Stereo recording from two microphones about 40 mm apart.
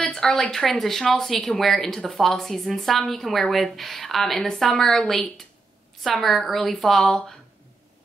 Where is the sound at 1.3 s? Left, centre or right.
Left.